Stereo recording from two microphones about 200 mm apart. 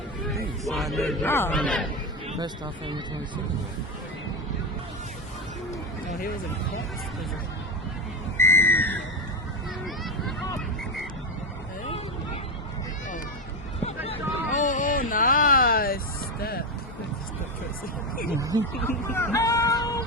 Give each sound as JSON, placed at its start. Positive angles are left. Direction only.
{"t": 0.6, "sound": "a sound", "side_deg": 0}
{"t": 1.2, "sound": "speech", "side_deg": 10}
{"t": 2.4, "sound": "speech", "side_deg": -25}
{"t": 8.4, "sound": "a sound", "side_deg": 10}
{"t": 9.8, "sound": "vehicle", "side_deg": 0}
{"t": 13.8, "sound": "a sound", "side_deg": 30}
{"t": 18.1, "sound": "speech", "side_deg": 45}
{"t": 18.3, "sound": "speech", "side_deg": -15}
{"t": 18.8, "sound": "speech", "side_deg": 10}